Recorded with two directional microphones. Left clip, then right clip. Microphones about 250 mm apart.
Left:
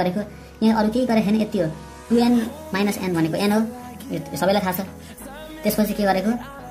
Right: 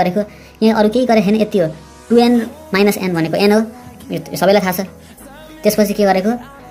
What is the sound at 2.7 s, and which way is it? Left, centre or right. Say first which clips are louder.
A woman's voice: right 9 dB; right.